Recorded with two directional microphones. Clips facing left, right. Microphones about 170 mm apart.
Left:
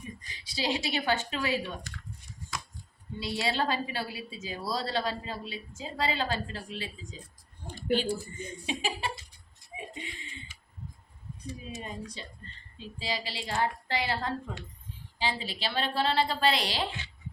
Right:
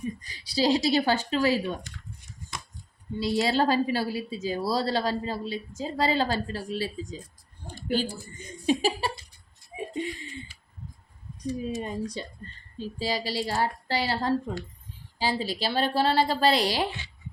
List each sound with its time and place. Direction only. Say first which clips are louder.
0.2 s a woman's voice: right 8 dB; 35° right (ahead or behind)
3.2 s a woman's voice: right 6 dB; 40° right (ahead or behind)
7.8 s a sound: even; 40° right (ahead or behind)
11.4 s a woman's voice: right 10 dB; 35° right (ahead or behind)